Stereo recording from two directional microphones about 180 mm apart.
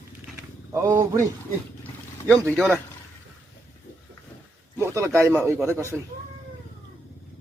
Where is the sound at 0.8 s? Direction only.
15° right (ahead or behind).